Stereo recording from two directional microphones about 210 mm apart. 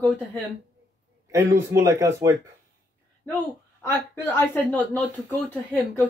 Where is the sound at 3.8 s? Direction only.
10° left (ahead or behind).